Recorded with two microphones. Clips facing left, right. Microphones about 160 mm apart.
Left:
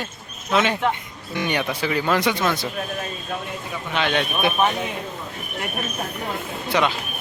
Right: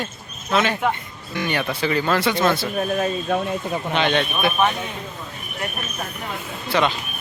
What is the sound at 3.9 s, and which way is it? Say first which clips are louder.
Speech: right 2 dB; 5° left (ahead or behind).